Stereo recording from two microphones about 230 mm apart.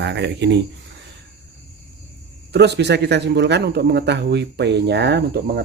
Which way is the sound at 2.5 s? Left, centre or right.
Right.